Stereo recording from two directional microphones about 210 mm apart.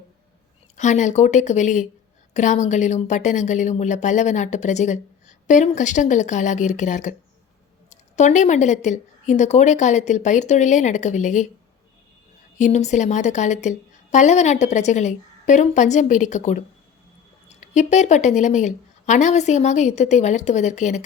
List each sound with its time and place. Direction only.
0.8 s a woman's voice: 35° left (ahead or behind)
12.5 s a woman's voice: 35° left (ahead or behind)